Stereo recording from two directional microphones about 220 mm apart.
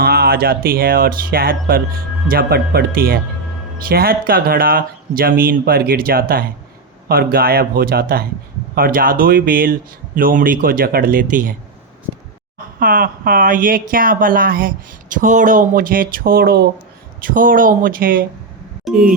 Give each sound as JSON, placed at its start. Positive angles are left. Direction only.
{"t": 0.0, "sound": "speech", "side_deg": -45}
{"t": 12.8, "sound": "speech", "side_deg": -40}
{"t": 18.9, "sound": "speech", "side_deg": -5}